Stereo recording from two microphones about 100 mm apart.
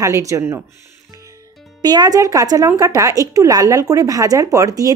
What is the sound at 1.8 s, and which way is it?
Speech, 40° right (ahead or behind).